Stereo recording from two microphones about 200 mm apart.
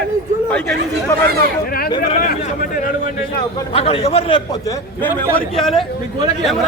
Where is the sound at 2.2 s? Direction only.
40° left (ahead or behind).